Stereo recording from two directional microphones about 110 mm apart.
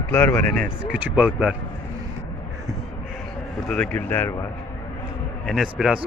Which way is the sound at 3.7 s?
10° left (ahead or behind).